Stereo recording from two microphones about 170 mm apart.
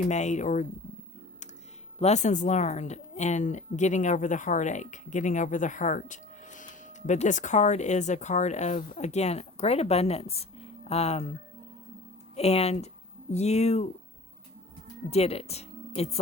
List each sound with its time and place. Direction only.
0.1 s a woman's voice: 45° left (ahead or behind)
2.0 s a woman's voice: 40° left (ahead or behind)
12.4 s speech: 35° left (ahead or behind)
15.1 s speech: 35° left (ahead or behind)